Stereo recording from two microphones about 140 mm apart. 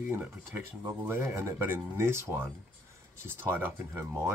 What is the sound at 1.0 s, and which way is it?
Speech, 15° right (ahead or behind).